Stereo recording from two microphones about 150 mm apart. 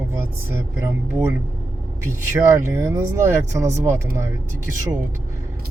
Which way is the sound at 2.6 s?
20° right (ahead or behind).